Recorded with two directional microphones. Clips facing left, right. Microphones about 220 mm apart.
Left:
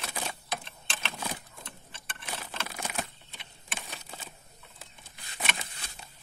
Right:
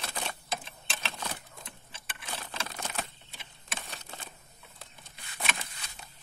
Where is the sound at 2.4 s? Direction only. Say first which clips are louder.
Left 1 dB; 5° left (ahead or behind).